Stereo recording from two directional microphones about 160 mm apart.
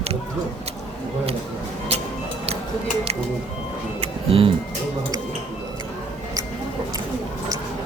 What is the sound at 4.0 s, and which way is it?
Music, 35° right (ahead or behind).